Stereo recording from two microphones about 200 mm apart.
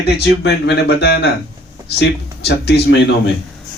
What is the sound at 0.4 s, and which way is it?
Speech, 55° left (ahead or behind).